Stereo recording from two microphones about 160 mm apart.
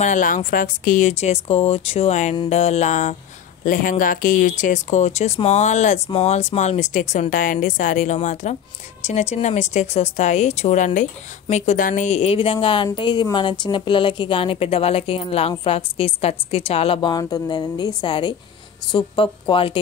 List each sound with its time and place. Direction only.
0.0 s a woman's voice: 55° left (ahead or behind); by 19.8 s 35° left (ahead or behind)